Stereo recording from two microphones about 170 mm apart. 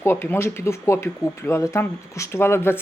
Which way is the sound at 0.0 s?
15° left (ahead or behind).